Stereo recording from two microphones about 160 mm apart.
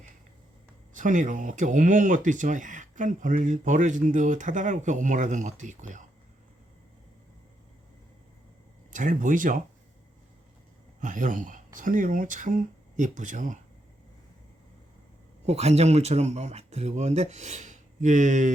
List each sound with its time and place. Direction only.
0.9 s speech: 55° right (ahead or behind)
8.9 s speech: 55° right (ahead or behind)
11.0 s speech: 55° right (ahead or behind)
15.4 s speech: 40° right (ahead or behind)